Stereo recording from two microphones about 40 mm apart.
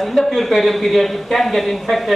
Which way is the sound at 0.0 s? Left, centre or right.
Centre.